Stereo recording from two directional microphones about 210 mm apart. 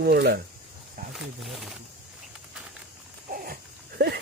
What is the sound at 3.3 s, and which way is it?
Pig, 45° right (ahead or behind).